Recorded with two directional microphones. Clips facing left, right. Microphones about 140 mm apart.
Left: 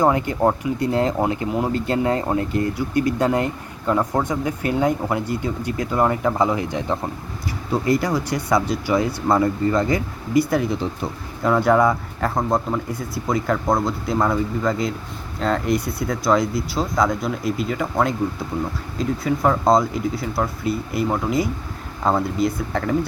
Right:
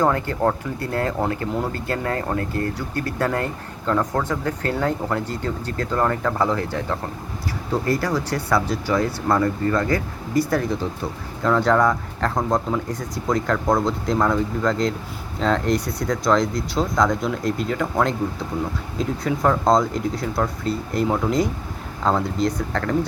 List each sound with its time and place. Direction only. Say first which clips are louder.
0.0 s speech: left 2 dB; 15° left (ahead or behind)